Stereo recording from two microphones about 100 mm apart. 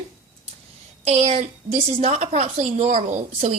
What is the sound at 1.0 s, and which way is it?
A woman's voice, 90° right.